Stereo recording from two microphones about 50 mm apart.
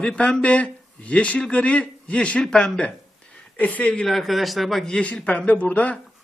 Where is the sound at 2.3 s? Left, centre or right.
Centre.